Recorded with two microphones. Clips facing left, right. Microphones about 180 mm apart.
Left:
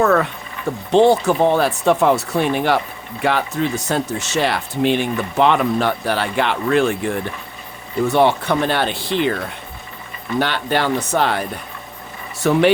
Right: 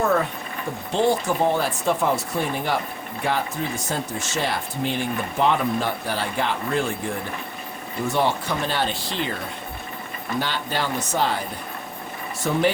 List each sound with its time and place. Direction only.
0.0 s vehicle: 75° left (ahead or behind)
0.9 s speech: 70° left (ahead or behind)
8.0 s speech: 65° left (ahead or behind)
10.4 s speech: 65° left (ahead or behind)
12.4 s speech: 70° left (ahead or behind)